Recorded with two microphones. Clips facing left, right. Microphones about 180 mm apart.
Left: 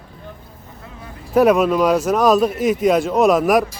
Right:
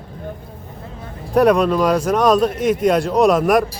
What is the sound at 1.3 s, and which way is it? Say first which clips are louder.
Speech: even; 5° left (ahead or behind).